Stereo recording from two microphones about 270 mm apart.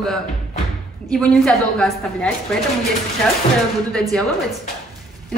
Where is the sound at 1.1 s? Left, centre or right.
Centre.